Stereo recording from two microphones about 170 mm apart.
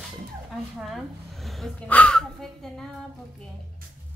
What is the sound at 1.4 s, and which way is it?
Gasp, 5° left (ahead or behind).